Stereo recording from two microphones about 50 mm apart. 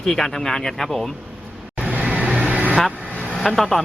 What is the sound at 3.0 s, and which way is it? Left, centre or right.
Vehicle, left.